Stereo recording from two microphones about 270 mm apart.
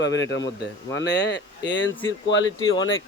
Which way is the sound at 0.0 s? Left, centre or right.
Left.